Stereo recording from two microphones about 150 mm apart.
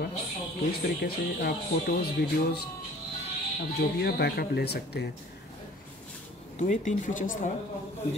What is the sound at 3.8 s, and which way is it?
Speech, 90° left.